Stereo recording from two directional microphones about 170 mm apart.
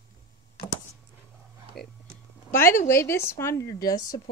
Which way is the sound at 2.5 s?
15° left (ahead or behind).